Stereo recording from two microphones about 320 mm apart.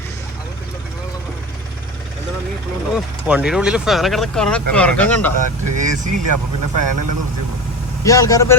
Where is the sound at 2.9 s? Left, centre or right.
Centre.